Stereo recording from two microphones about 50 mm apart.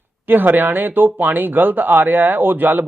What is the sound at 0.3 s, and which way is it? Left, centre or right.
Speech, right.